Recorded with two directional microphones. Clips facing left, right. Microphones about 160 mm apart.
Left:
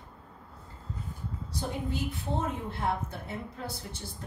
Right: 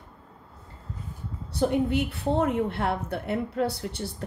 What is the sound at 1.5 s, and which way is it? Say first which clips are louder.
A woman's voice: right 11 dB; 65° right (ahead or behind).